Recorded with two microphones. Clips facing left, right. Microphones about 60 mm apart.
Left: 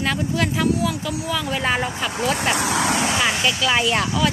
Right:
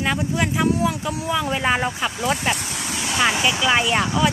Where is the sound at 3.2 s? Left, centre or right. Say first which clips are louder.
Right 1 dB; centre.